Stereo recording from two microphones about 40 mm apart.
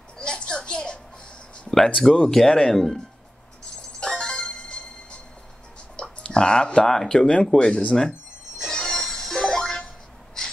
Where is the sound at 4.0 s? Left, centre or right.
Left.